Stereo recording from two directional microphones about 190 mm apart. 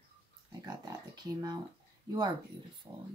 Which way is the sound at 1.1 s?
20° right (ahead or behind).